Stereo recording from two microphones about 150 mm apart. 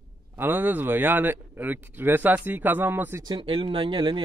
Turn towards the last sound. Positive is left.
turn(degrees=-35)  # may be behind; listen again after turning